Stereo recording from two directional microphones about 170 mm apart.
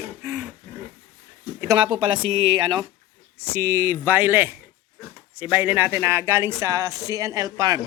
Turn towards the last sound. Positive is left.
turn(degrees=-20)  # may be behind; listen again after turning